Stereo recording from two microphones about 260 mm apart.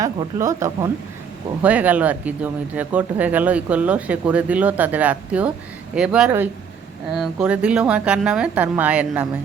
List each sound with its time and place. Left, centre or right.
0.0 s speech: centre